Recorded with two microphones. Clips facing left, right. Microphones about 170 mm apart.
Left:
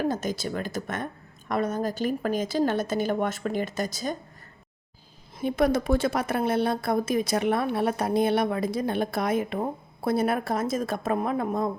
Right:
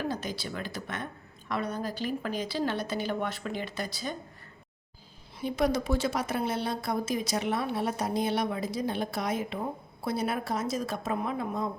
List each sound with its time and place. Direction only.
0.0 s a woman's voice: 45° left (ahead or behind)
5.4 s a woman's voice: 55° left (ahead or behind)